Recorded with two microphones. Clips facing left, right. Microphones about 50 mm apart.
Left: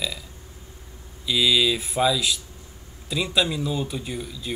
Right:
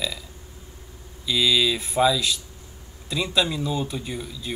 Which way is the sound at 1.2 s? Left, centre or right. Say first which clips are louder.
Even; centre.